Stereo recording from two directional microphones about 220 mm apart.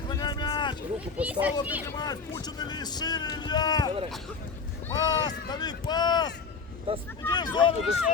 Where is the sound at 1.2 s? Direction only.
5° right (ahead or behind).